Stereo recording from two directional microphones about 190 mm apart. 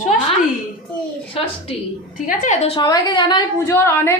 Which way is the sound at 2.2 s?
40° left (ahead or behind).